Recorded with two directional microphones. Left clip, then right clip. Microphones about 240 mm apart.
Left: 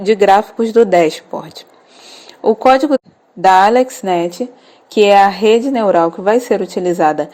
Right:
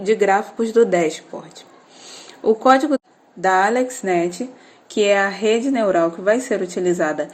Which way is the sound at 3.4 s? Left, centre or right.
Left.